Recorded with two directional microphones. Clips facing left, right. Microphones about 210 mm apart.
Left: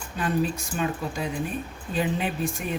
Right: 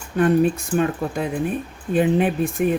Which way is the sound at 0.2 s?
55° right (ahead or behind).